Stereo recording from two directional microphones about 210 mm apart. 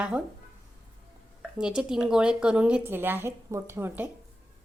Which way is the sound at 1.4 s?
5° right (ahead or behind).